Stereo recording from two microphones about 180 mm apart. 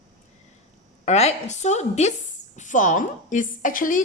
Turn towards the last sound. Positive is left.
turn(degrees=45)  # may be behind; listen again after turning